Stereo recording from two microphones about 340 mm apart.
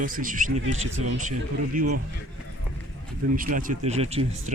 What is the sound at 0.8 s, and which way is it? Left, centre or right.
Speech, right.